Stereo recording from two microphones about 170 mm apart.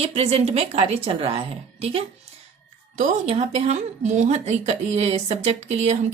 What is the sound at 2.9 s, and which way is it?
Speech, 45° right (ahead or behind).